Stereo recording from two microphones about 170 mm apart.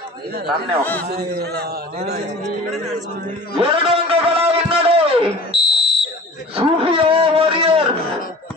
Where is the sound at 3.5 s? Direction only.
30° right (ahead or behind).